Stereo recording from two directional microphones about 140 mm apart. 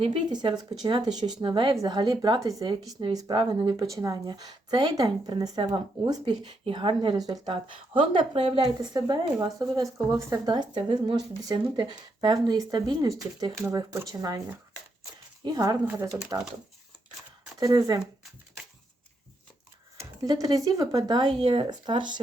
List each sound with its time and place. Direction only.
0.0 s speech: 35° right (ahead or behind)
8.8 s speech: 30° right (ahead or behind)
17.6 s speech: 25° right (ahead or behind)
20.0 s speech: 25° right (ahead or behind)